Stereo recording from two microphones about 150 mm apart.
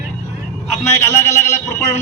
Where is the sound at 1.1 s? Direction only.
20° left (ahead or behind).